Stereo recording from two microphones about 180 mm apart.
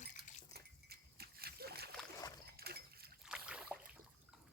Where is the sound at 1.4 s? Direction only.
60° right (ahead or behind).